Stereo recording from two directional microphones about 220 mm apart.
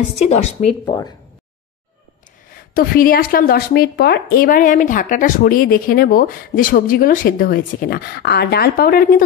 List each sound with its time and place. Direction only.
0.2 s a woman's voice: 30° left (ahead or behind)
2.7 s speech: 40° left (ahead or behind)